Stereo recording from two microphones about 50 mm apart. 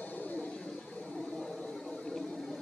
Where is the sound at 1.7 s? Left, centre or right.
Centre.